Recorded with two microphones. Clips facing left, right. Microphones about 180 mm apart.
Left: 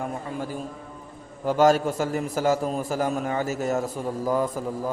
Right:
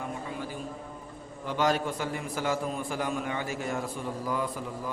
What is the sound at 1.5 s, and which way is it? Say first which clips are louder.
A man's voice: left 8 dB; 45° left (ahead or behind).